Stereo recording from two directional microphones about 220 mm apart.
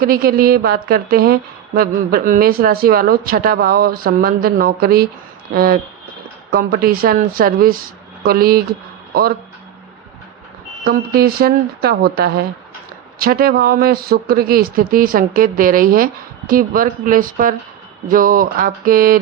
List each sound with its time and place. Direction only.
0.0 s a woman's voice: 40° right (ahead or behind)
10.8 s a woman's voice: 45° right (ahead or behind)